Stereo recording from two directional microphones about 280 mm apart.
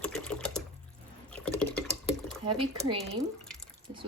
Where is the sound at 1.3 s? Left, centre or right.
Centre.